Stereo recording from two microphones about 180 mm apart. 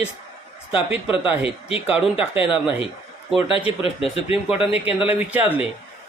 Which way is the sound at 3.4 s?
30° left (ahead or behind).